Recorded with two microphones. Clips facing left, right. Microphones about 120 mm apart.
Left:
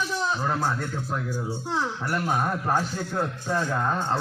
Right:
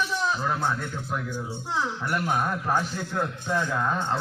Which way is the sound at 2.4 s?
15° left (ahead or behind).